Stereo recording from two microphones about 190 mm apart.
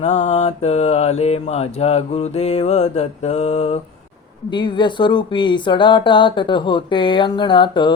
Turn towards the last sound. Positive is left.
turn(degrees=25)  # may be behind; listen again after turning